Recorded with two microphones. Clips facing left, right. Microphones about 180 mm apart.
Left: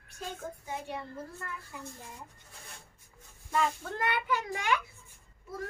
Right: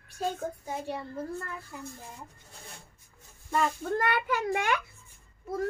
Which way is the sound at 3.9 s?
45° right (ahead or behind).